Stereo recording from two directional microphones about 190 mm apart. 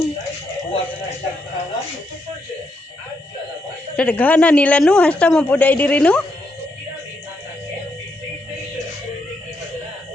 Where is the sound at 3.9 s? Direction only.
5° left (ahead or behind).